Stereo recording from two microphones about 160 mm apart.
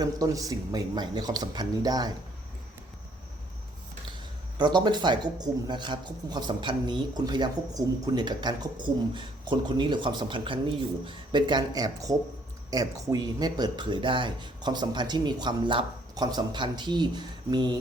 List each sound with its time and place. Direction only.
0.0 s a man's voice: 20° right (ahead or behind)
4.5 s a man's voice: 25° right (ahead or behind)